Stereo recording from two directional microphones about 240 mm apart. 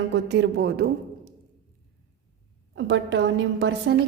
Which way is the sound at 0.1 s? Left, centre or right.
Right.